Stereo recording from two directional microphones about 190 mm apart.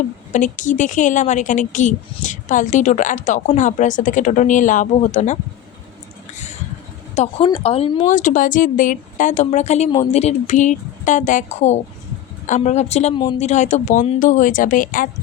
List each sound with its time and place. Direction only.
0.3 s speech: 40° left (ahead or behind)
7.2 s speech: 30° left (ahead or behind)
8.0 s speech: 40° left (ahead or behind)